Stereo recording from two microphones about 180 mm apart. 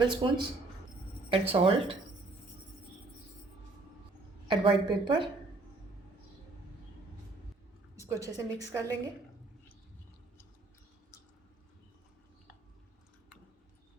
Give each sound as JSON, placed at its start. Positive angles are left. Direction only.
{"t": 0.0, "sound": "a woman's voice", "side_deg": -25}
{"t": 4.4, "sound": "a woman's voice", "side_deg": -25}
{"t": 8.0, "sound": "a woman's voice", "side_deg": -15}